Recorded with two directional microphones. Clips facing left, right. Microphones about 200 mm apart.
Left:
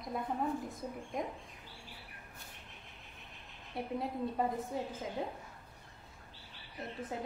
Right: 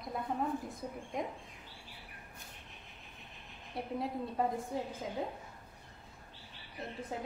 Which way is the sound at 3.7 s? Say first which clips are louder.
Even; centre (ahead or behind).